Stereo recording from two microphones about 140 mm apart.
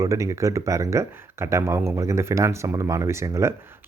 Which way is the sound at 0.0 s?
20° right (ahead or behind).